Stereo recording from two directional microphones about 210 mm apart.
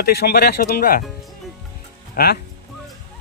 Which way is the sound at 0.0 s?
50° left (ahead or behind).